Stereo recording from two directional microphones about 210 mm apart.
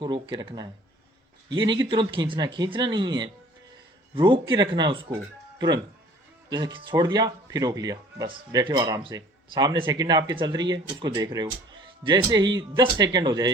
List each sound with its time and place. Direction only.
0.0 s speech: 20° right (ahead or behind)